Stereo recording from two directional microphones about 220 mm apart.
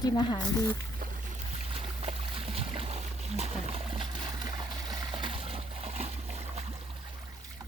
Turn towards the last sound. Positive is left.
turn(degrees=-30)  # may be behind; listen again after turning